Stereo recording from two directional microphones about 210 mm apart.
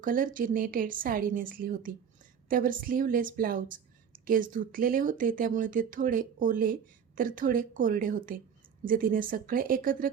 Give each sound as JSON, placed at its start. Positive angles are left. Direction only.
{"t": 0.0, "sound": "speech", "side_deg": -40}